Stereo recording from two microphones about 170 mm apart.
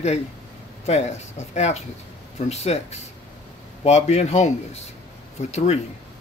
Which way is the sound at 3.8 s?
40° left (ahead or behind).